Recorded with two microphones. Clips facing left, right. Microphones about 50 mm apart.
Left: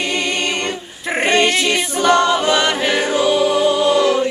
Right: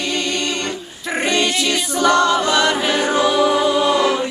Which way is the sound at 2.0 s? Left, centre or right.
Left.